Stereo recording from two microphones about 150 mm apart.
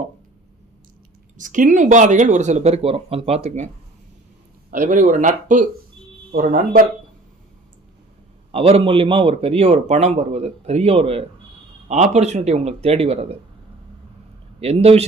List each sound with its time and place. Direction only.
1.4 s speech: 60° right (ahead or behind)
4.7 s speech: 60° right (ahead or behind)
6.3 s speech: 70° right (ahead or behind)
8.5 s a man's voice: 40° right (ahead or behind)
11.9 s speech: 50° right (ahead or behind)
14.6 s speech: 45° right (ahead or behind)